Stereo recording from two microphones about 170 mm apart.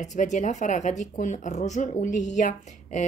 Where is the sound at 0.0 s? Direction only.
45° left (ahead or behind).